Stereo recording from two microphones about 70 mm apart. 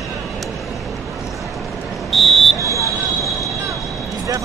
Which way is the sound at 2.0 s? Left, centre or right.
Centre.